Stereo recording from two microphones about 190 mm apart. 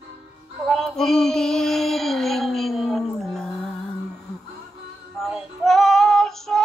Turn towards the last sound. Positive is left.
turn(degrees=0)  # may be behind; listen again after turning